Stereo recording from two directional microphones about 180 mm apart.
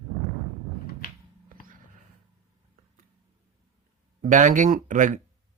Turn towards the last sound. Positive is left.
turn(degrees=-45)  # may be behind; listen again after turning